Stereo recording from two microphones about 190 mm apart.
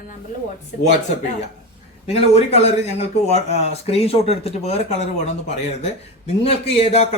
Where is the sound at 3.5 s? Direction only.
35° left (ahead or behind).